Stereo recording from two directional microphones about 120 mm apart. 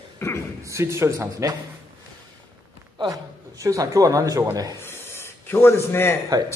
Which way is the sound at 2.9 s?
35° right (ahead or behind).